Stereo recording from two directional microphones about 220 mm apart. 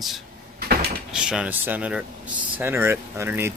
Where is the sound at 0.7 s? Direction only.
45° right (ahead or behind).